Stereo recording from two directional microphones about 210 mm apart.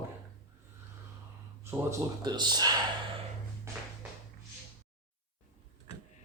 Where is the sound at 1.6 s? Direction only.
15° right (ahead or behind).